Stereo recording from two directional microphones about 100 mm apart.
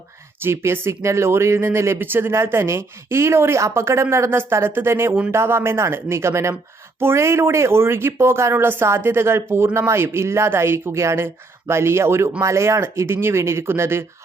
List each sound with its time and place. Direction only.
0.4 s speech: 25° right (ahead or behind)